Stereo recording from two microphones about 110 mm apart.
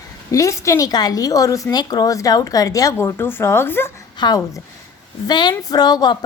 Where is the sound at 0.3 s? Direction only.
30° left (ahead or behind).